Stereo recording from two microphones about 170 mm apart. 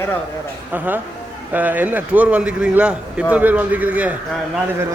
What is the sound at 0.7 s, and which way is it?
Speech, 10° right (ahead or behind).